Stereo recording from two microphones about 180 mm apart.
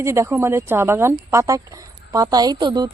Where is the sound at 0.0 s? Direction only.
15° right (ahead or behind).